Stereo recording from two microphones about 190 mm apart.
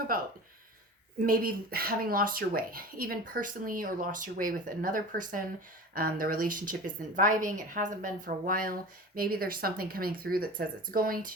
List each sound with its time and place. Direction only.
1.2 s speech: 50° right (ahead or behind)